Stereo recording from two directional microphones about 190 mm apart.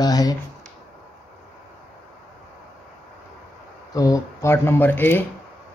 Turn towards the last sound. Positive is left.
turn(degrees=10)  # may be behind; listen again after turning